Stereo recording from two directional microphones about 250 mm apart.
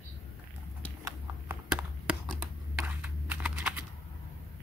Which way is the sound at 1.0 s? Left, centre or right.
Centre.